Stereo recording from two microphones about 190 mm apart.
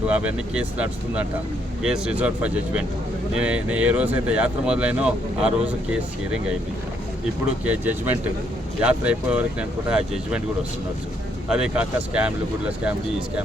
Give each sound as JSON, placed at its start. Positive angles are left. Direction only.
{"t": 0.1, "sound": "speech", "side_deg": -5}
{"t": 7.6, "sound": "speech", "side_deg": -10}
{"t": 11.5, "sound": "speech", "side_deg": -5}